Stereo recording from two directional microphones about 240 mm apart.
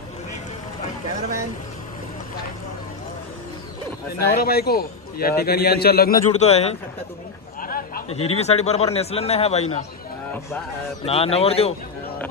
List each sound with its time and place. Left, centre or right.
4.2 s a man's voice: left
7.6 s a sound: left
8.3 s a man's voice: left
11.1 s a man's voice: left